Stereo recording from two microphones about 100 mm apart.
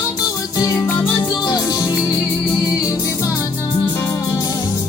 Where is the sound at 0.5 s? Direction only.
35° left (ahead or behind).